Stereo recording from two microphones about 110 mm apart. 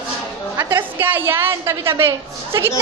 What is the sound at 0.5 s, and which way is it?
A woman's voice, 20° right (ahead or behind).